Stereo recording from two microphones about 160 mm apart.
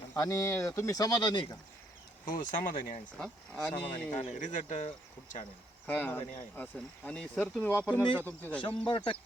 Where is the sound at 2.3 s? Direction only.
60° left (ahead or behind).